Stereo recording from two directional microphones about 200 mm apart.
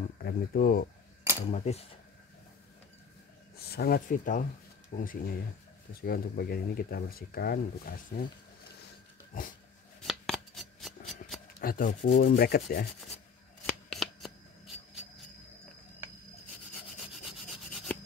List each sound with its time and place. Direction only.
0.2 s speech: 45° left (ahead or behind)
1.5 s speech: 35° left (ahead or behind)
3.5 s speech: 50° left (ahead or behind)
9.3 s speech: 45° left (ahead or behind)
10.0 s shuffling cards: centre (ahead or behind)
11.6 s speech: 45° left (ahead or behind)
13.7 s shuffling cards: centre (ahead or behind)
17.3 s rub: centre (ahead or behind)